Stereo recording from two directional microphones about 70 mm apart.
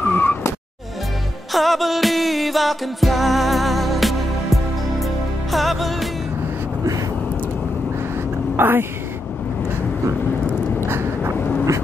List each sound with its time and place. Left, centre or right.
0.0 s vehicle: left
1.5 s music: centre
8.5 s speech: right
10.9 s vehicle: right